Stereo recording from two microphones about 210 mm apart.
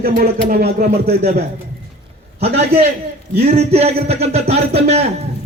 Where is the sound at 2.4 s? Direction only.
30° right (ahead or behind).